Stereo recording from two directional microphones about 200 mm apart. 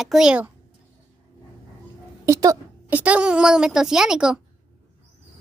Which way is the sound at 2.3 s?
15° right (ahead or behind).